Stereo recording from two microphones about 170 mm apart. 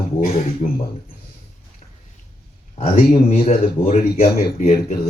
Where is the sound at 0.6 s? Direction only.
40° left (ahead or behind).